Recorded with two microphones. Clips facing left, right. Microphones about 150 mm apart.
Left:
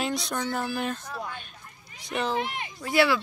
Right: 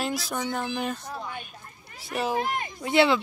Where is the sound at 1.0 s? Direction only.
20° right (ahead or behind).